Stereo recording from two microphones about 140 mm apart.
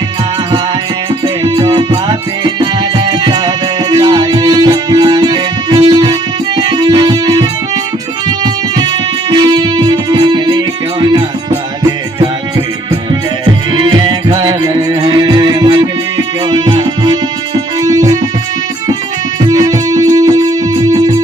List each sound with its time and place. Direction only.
1.5 s music: 35° right (ahead or behind)
11.8 s music: 30° right (ahead or behind)
19.5 s music: 25° right (ahead or behind)